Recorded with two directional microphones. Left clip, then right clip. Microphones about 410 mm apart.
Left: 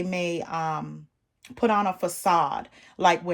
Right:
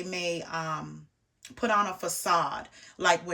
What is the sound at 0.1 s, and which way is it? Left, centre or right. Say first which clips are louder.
Speech: even; centre.